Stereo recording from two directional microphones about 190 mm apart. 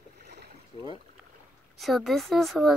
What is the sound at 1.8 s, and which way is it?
Speech, centre (ahead or behind).